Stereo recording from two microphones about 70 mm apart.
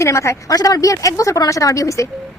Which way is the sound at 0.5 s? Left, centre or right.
Left.